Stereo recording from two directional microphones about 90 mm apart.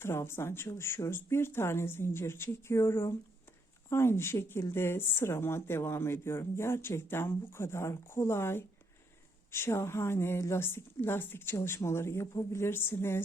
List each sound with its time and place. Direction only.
0.0 s speech: 25° left (ahead or behind)